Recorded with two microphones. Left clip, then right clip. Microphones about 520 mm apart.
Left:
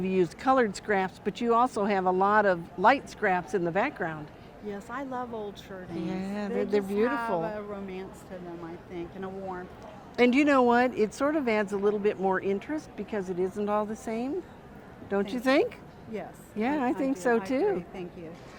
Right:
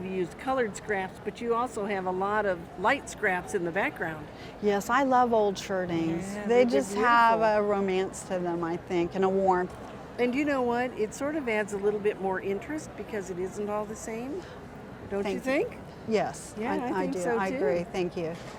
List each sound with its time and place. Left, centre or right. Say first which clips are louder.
0.0 s speech: left 5 dB; left
4.6 s speech: right 12 dB; right
6.1 s speech: even; left
6.5 s a woman's voice: right 6 dB; right
10.2 s speech: left 5 dB; left
17.7 s speech: right 8 dB; right